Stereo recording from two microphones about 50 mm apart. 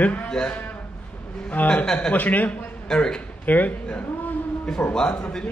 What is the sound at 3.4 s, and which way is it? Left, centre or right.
Speech, left.